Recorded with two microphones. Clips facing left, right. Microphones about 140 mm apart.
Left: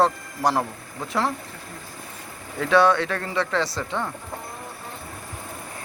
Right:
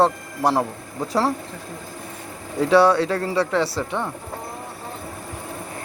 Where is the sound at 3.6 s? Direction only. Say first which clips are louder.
Right 3 dB; 10° right (ahead or behind).